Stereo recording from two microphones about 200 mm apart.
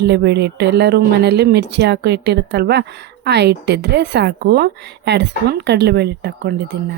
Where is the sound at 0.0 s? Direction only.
55° right (ahead or behind).